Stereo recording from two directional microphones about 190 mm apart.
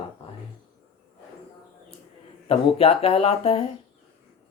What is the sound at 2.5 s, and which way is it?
Speech, 30° left (ahead or behind).